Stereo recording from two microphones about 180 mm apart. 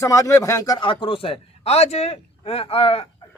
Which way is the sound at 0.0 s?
20° left (ahead or behind).